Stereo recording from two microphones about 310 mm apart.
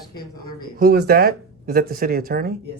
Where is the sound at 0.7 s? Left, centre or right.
Right.